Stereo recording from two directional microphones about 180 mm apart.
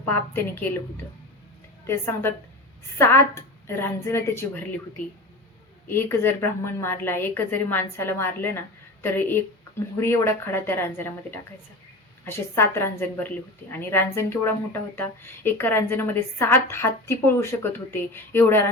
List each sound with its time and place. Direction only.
0.0 s a woman's voice: 10° left (ahead or behind)
3.0 s a woman's voice: 15° left (ahead or behind)
5.9 s a woman's voice: 10° left (ahead or behind)